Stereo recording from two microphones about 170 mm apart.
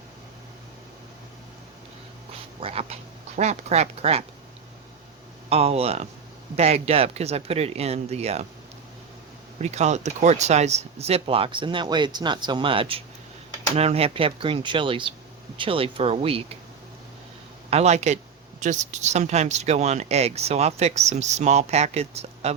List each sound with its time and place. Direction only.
2.6 s speech: 35° right (ahead or behind)
5.5 s speech: 35° right (ahead or behind)
9.6 s speech: 40° right (ahead or behind)
17.7 s speech: 40° right (ahead or behind)